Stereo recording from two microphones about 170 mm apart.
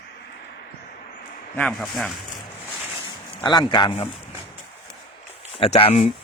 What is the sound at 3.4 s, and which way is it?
Speech, 25° left (ahead or behind).